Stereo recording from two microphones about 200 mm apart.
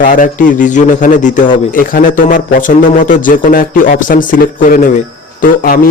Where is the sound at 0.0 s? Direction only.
40° left (ahead or behind).